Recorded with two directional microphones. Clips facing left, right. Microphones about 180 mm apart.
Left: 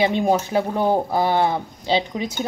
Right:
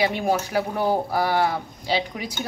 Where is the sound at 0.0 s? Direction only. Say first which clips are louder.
Left 4 dB; 20° left (ahead or behind).